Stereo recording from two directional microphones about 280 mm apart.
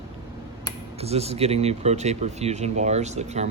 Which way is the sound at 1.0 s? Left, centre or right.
Right.